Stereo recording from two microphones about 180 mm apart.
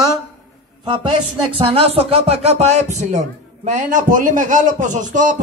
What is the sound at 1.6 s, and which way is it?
A man's voice, 30° right (ahead or behind).